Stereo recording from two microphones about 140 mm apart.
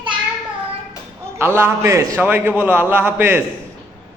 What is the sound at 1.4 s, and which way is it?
A man's voice, 15° right (ahead or behind).